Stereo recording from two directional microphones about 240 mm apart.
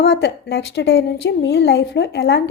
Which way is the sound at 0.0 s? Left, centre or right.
Left.